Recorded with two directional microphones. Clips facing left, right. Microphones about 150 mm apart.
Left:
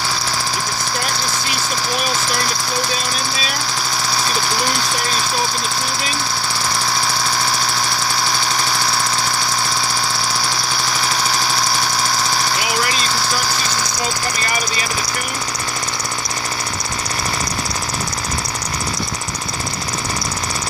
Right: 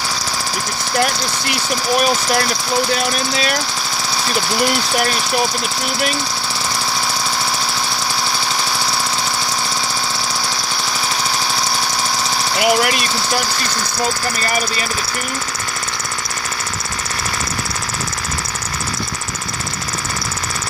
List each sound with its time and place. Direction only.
12.5 s engine: 65° right (ahead or behind)